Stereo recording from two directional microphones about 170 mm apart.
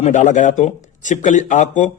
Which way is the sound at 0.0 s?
45° left (ahead or behind).